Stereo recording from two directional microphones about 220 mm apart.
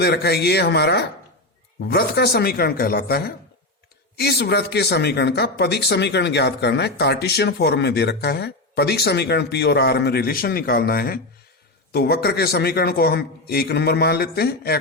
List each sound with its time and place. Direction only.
0.0 s speech: 50° left (ahead or behind)